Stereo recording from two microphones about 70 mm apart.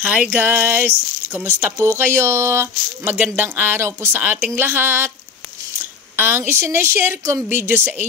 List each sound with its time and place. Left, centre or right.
0.0 s a sound: centre
0.4 s speech: right
3.8 s speech: right
4.2 s a sound: right
4.6 s speech: right
6.1 s speech: right